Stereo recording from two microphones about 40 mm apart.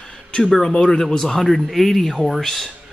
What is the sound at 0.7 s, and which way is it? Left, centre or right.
Speech, centre.